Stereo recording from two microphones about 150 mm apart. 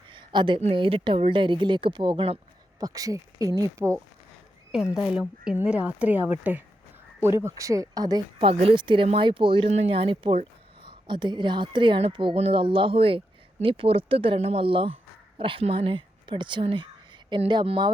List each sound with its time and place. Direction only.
0.1 s a sound: 30° right (ahead or behind)
0.6 s speech: 35° right (ahead or behind)
2.8 s speech: 25° right (ahead or behind)
5.5 s speech: 5° right (ahead or behind); by 8.2 s 25° right (ahead or behind)
8.4 s speech: 40° right (ahead or behind)